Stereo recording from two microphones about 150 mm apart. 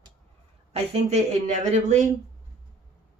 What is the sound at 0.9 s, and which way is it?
Speech, 50° right (ahead or behind).